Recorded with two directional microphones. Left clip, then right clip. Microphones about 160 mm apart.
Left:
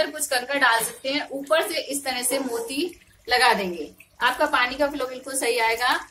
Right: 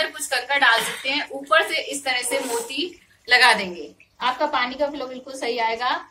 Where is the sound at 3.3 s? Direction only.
55° left (ahead or behind).